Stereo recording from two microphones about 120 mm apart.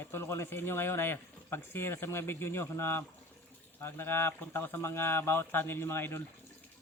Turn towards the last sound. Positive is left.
turn(degrees=20)  # may be behind; listen again after turning